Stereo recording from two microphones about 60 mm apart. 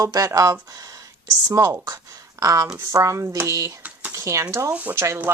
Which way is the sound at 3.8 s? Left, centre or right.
Right.